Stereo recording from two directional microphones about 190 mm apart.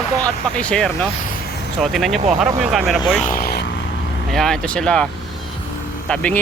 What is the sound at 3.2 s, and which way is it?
Speech, 50° left (ahead or behind).